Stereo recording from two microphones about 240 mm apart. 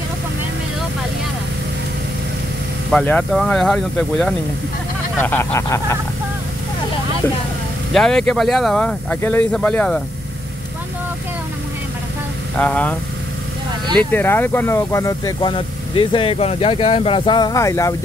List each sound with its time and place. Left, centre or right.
2.9 s speech: centre
7.9 s speech: centre
12.5 s speech: centre
13.9 s speech: centre